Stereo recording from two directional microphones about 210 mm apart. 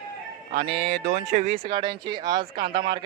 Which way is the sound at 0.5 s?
25° right (ahead or behind).